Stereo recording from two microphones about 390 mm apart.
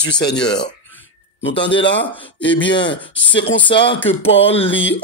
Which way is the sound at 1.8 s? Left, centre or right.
Left.